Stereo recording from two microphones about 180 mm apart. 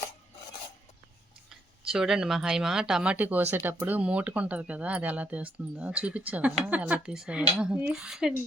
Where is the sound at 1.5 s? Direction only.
5° right (ahead or behind).